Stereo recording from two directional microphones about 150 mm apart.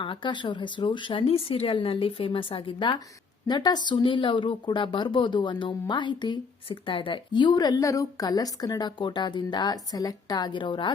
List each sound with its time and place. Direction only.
0.0 s speech: 30° left (ahead or behind)